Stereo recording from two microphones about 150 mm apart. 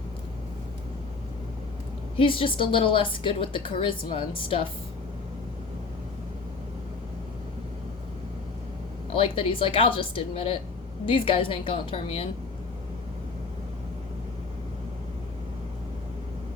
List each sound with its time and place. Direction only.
2.1 s a woman's voice: 35° left (ahead or behind)
9.1 s a woman's voice: 40° left (ahead or behind)